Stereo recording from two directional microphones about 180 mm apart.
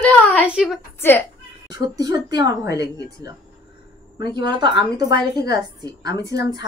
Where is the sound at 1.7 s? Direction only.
20° right (ahead or behind).